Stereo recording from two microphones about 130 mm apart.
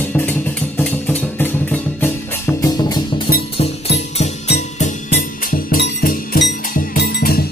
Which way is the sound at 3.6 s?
55° left (ahead or behind).